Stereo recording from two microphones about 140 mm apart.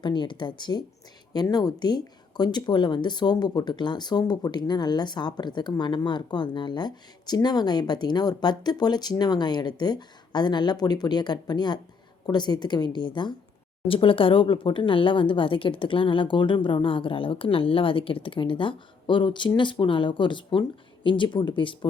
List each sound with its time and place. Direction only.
0.0 s speech: 35° left (ahead or behind)